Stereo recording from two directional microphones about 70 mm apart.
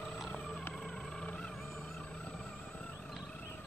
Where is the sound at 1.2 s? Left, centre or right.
Centre.